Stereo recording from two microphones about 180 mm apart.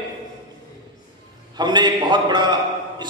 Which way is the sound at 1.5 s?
25° right (ahead or behind).